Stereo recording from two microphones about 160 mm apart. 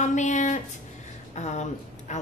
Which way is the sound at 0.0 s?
50° left (ahead or behind).